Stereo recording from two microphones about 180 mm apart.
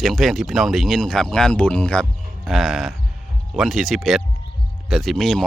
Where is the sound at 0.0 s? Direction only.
Centre (ahead or behind).